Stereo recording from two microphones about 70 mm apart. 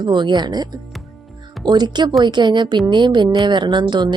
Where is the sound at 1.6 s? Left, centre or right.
Right.